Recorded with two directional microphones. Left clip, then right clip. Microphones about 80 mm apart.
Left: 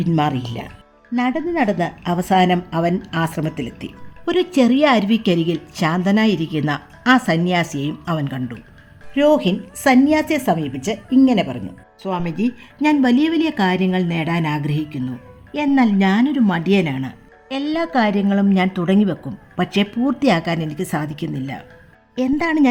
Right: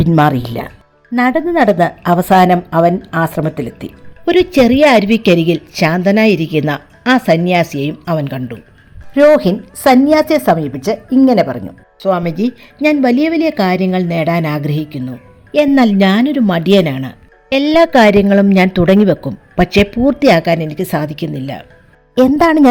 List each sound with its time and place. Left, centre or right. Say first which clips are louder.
0.2 s speech: right 10 dB; right
1.1 s a woman's voice: right 8 dB; right
2.6 s a woman's voice: right 10 dB; right
3.1 s speech: right 7 dB; centre
4.3 s a woman's voice: right 7 dB; right
5.7 s a woman's voice: right 7 dB; right
9.7 s a woman's voice: right 6 dB; right
11.9 s speech: right 9 dB; right
12.8 s a woman's voice: right 5 dB; right
15.5 s speech: right 7 dB; right
16.5 s speech: right 7 dB; right
17.5 s a woman's voice: right 11 dB; right
19.6 s a woman's voice: right 8 dB; right
22.4 s a woman's voice: right 7 dB; right